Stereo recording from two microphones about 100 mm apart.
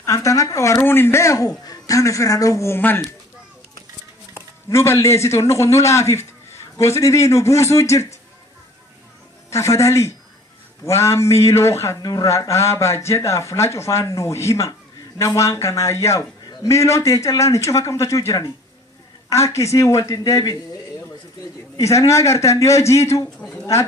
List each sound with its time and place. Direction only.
0.0 s a sound: 30° left (ahead or behind)
0.8 s speech: 25° left (ahead or behind)
4.6 s speech: 30° left (ahead or behind)
9.5 s speech: 30° left (ahead or behind)
12.0 s a man's voice: 40° left (ahead or behind)
21.7 s a man's voice: 30° left (ahead or behind)